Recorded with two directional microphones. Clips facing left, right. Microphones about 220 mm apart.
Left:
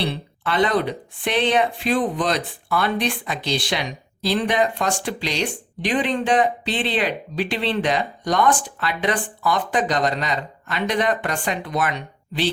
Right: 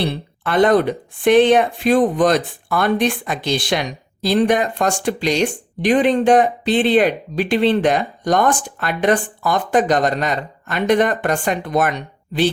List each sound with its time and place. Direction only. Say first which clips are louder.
0.0 s speech: right 3 dB; 50° right (ahead or behind)